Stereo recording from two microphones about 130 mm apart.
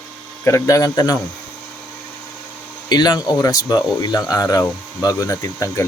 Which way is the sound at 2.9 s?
30° left (ahead or behind).